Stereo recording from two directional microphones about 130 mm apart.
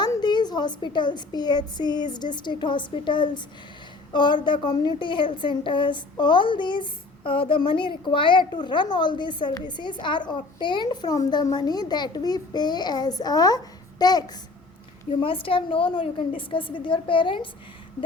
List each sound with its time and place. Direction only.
0.0 s a woman's voice: 35° left (ahead or behind)
15.1 s a woman's voice: 40° left (ahead or behind)